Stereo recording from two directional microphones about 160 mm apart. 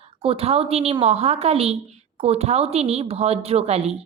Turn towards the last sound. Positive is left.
turn(degrees=-40)  # may be behind; listen again after turning